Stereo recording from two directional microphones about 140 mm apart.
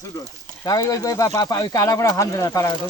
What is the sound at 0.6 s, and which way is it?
Speech, 25° left (ahead or behind).